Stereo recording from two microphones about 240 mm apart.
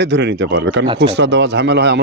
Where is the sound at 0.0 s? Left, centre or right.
Right.